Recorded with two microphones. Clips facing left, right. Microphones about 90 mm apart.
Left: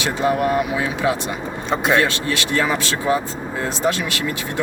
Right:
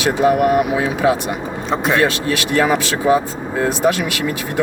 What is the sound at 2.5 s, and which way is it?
Speech, 20° right (ahead or behind).